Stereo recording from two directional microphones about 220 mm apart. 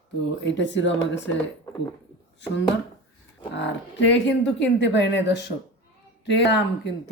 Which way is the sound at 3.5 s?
55° left (ahead or behind).